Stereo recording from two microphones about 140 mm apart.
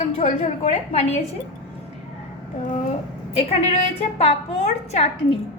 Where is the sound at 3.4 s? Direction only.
50° left (ahead or behind).